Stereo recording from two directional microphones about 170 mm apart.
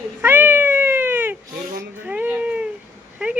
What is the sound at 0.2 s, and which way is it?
Cat, 10° right (ahead or behind).